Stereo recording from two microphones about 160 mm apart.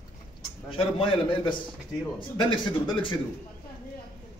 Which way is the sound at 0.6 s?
35° left (ahead or behind).